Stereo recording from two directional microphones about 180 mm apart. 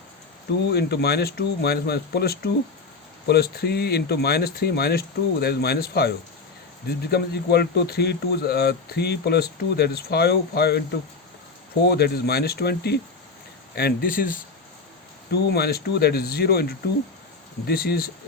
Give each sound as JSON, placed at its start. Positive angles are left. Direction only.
{"t": 0.7, "sound": "speech", "side_deg": 65}
{"t": 11.9, "sound": "speech", "side_deg": 60}
{"t": 15.3, "sound": "speech", "side_deg": 60}